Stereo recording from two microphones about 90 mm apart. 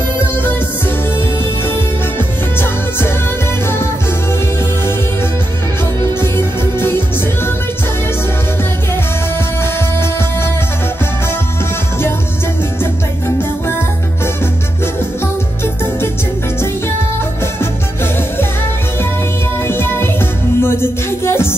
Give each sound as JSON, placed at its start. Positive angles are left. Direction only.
{"t": 2.1, "sound": "music", "side_deg": 25}
{"t": 6.2, "sound": "music", "side_deg": 25}
{"t": 9.6, "sound": "music", "side_deg": 25}
{"t": 19.7, "sound": "music", "side_deg": 25}